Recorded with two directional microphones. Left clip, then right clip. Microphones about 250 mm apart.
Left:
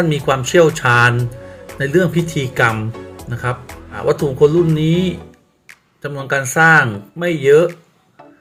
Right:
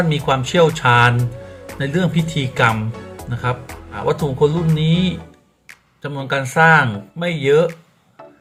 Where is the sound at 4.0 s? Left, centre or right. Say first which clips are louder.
Left 4 dB; centre.